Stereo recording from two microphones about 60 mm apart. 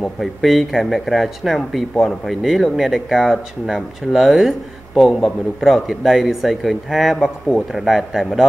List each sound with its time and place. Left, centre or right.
0.0 s speech: centre
7.2 s a man's voice: centre
7.7 s speech: centre